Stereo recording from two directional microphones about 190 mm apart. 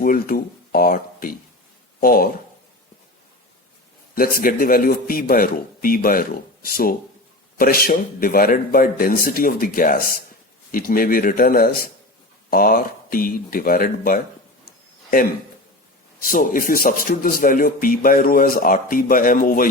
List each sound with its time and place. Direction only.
0.0 s speech: 50° left (ahead or behind)
4.1 s speech: 50° left (ahead or behind)